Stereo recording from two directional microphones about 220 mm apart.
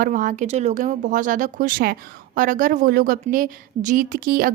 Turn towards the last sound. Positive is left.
turn(degrees=-40)  # may be behind; listen again after turning